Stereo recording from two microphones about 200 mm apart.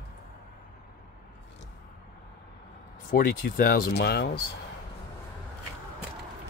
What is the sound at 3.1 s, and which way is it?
Speech, 50° left (ahead or behind).